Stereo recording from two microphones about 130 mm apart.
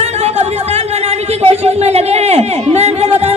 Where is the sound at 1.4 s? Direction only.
55° right (ahead or behind).